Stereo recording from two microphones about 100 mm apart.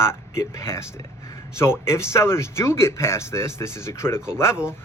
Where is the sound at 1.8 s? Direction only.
25° left (ahead or behind).